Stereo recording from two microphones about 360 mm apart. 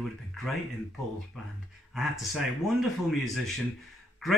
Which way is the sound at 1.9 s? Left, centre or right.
Centre.